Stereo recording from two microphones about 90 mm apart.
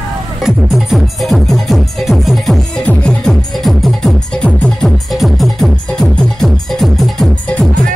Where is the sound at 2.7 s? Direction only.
10° left (ahead or behind).